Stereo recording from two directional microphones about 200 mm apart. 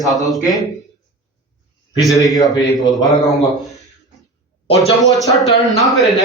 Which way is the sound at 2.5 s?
20° left (ahead or behind).